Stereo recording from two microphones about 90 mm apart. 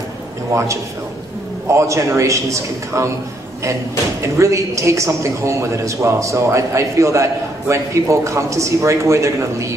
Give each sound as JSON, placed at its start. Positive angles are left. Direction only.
{"t": 1.7, "sound": "a man's voice", "side_deg": -35}
{"t": 4.2, "sound": "a man's voice", "side_deg": -35}